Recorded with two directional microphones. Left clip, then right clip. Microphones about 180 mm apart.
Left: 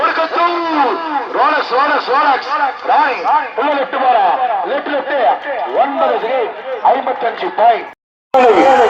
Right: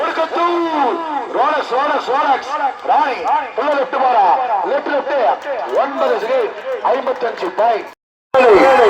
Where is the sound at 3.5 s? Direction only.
40° right (ahead or behind).